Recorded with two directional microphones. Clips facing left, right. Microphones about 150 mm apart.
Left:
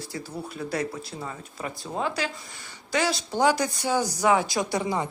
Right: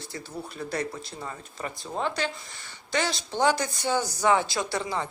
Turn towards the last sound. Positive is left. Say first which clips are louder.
# left 3 dB
turn(degrees=15)  # may be behind; listen again after turning